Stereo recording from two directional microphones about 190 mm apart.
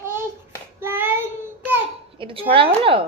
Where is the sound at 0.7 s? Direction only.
10° right (ahead or behind).